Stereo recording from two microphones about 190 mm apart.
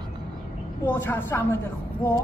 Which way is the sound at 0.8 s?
10° left (ahead or behind).